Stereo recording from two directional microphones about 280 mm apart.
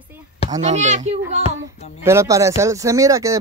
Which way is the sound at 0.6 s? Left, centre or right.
Right.